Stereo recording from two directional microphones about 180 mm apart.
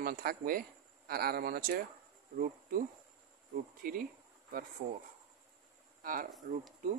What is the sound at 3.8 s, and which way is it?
Speech, 50° right (ahead or behind).